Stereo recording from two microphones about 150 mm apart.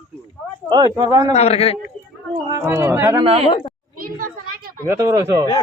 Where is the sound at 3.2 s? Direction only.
40° right (ahead or behind).